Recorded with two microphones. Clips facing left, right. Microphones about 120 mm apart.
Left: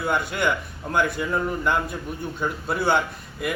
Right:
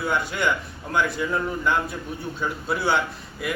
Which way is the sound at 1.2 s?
5° left (ahead or behind).